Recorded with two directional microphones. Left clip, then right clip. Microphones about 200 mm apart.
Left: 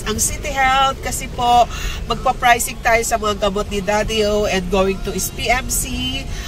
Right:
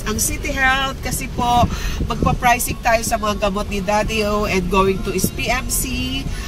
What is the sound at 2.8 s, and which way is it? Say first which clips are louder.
Speech: left 1 dB; centre (ahead or behind).